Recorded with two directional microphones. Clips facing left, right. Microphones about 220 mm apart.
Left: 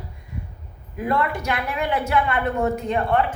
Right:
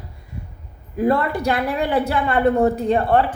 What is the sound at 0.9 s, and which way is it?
A woman's voice, 35° right (ahead or behind).